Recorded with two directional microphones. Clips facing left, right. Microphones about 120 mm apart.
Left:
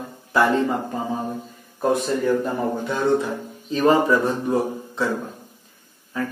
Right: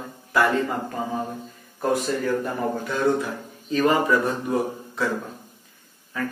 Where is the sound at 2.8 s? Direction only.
25° left (ahead or behind).